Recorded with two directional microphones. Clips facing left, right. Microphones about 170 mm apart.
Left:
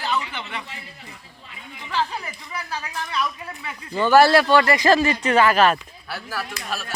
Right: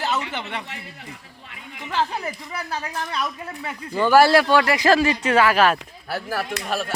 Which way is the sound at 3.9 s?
10° right (ahead or behind).